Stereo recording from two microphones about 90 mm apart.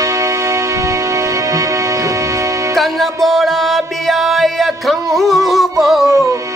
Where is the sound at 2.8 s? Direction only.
Centre (ahead or behind).